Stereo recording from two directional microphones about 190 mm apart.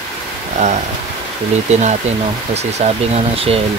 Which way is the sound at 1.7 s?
35° right (ahead or behind).